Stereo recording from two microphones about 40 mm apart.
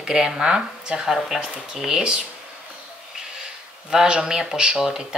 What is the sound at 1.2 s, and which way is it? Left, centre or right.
Speech, centre.